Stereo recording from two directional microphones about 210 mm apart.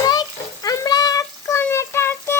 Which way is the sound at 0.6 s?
15° left (ahead or behind).